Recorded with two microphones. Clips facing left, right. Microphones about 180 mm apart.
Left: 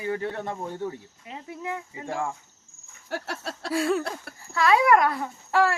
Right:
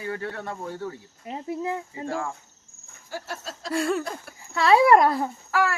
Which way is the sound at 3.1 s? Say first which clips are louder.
Left 2 dB; 70° left (ahead or behind).